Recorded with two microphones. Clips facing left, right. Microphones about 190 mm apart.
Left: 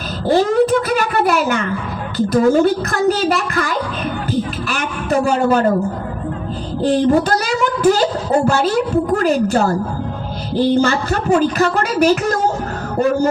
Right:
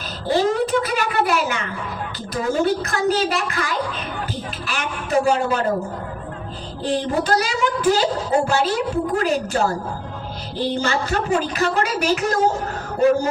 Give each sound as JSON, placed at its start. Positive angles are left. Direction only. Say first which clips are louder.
{"t": 0.3, "sound": "a woman's voice", "louder": "left 5 dB", "side_deg": 45}
{"t": 6.8, "sound": "a woman's voice", "louder": "left 7 dB", "side_deg": 45}